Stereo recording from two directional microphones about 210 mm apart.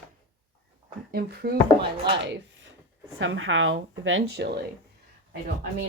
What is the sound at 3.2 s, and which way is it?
A woman's voice, 65° right (ahead or behind).